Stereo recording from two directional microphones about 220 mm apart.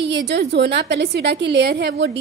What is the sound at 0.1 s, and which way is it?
A woman's voice, 50° right (ahead or behind).